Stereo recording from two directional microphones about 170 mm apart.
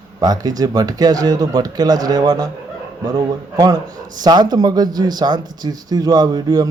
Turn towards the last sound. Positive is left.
turn(degrees=-20)  # may be behind; listen again after turning